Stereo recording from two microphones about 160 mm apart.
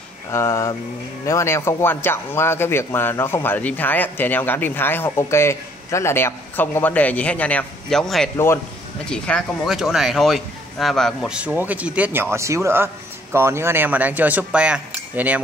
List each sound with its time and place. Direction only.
0.3 s speech: 20° left (ahead or behind); by 15.4 s 10° right (ahead or behind)